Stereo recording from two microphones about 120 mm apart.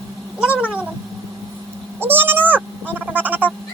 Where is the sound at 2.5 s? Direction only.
15° right (ahead or behind).